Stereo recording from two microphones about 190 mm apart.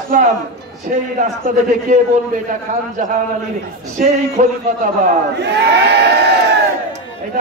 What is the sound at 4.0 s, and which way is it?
Speech, 45° right (ahead or behind).